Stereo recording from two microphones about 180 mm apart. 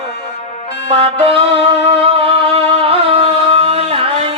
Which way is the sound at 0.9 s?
30° right (ahead or behind).